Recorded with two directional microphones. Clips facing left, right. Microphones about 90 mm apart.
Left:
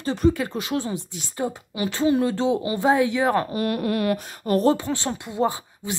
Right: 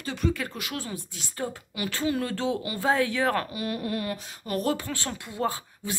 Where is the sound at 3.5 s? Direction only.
55° left (ahead or behind).